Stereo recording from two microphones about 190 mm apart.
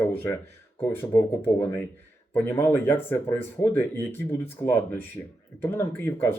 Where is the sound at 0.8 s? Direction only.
10° left (ahead or behind).